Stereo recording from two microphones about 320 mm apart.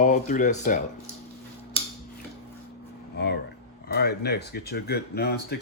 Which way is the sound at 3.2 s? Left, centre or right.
Left.